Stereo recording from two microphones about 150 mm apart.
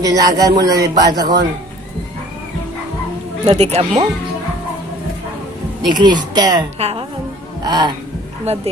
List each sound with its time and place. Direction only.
0.0 s a man's voice: 25° right (ahead or behind)
3.4 s speech: 45° right (ahead or behind)
5.9 s a man's voice: 30° right (ahead or behind)
6.7 s speech: 45° right (ahead or behind)
7.6 s a man's voice: 30° right (ahead or behind)
8.5 s speech: 45° right (ahead or behind)